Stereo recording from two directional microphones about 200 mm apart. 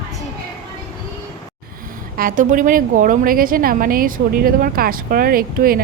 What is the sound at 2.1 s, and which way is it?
A woman's voice, 45° right (ahead or behind).